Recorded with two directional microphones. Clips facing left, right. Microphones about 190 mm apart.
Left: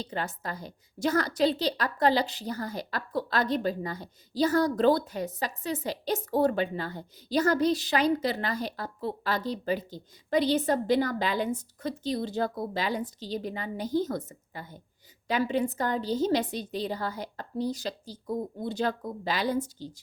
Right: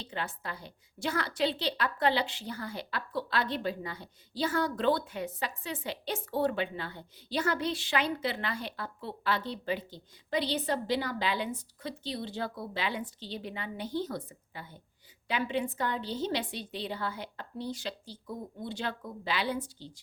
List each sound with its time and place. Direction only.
0.0 s a woman's voice: 40° left (ahead or behind)